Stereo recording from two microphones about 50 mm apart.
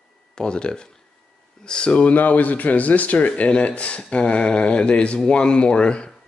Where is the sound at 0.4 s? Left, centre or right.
Centre.